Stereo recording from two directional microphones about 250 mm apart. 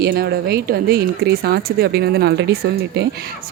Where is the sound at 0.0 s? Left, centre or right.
Right.